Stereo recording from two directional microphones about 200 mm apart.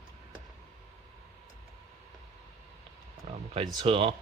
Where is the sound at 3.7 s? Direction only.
25° right (ahead or behind).